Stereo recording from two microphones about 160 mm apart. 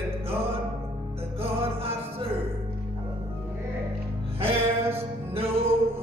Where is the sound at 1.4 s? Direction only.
35° right (ahead or behind).